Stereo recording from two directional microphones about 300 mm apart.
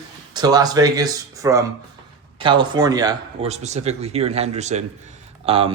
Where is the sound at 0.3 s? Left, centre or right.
Centre.